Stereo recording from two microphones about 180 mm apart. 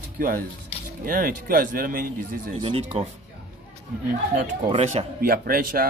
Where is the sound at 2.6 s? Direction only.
30° right (ahead or behind).